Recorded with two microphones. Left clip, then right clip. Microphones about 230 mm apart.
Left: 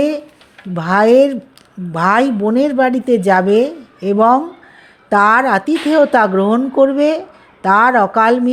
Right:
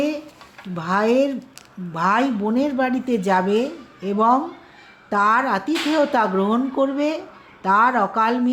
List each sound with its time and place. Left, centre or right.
0.8 s a woman's voice: left